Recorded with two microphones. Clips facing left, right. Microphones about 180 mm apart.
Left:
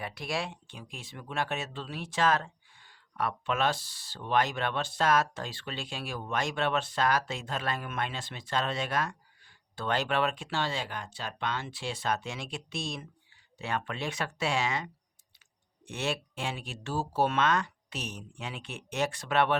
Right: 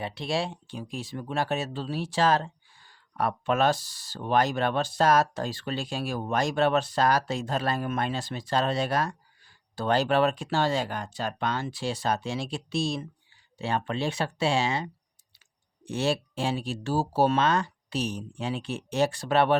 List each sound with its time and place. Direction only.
0.0 s speech: 25° right (ahead or behind)